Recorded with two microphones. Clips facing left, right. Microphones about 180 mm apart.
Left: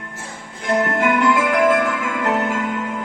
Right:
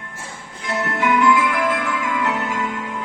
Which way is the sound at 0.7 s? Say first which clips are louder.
Left 3 dB; 55° left (ahead or behind).